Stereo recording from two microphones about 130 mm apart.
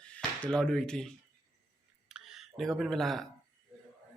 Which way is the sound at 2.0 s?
5° right (ahead or behind).